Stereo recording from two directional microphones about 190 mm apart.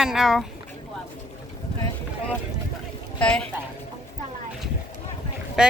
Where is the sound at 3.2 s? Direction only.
5° left (ahead or behind).